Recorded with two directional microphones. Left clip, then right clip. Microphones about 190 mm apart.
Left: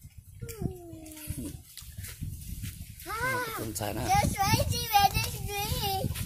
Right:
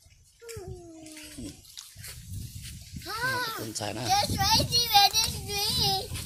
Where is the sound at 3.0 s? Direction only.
15° left (ahead or behind).